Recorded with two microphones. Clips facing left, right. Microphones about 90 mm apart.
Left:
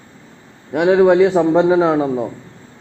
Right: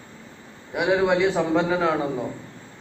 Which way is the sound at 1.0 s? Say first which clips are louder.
Left 12 dB; 40° left (ahead or behind).